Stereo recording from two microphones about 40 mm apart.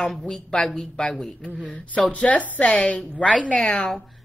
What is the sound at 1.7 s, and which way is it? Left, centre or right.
Speech, left.